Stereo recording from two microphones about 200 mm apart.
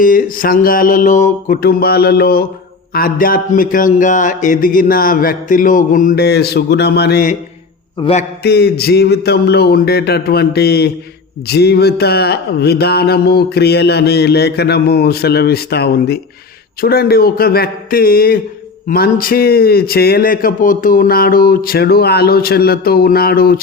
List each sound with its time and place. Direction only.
0.0 s speech: 40° left (ahead or behind)
8.4 s speech: 50° left (ahead or behind)